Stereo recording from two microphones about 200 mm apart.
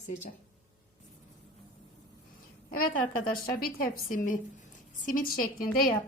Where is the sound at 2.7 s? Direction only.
45° left (ahead or behind).